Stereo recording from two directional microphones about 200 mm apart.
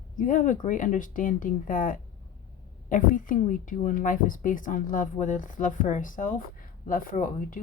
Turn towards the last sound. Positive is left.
turn(degrees=45)  # may be behind; listen again after turning